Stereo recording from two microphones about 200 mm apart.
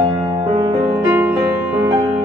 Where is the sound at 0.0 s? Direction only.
20° right (ahead or behind).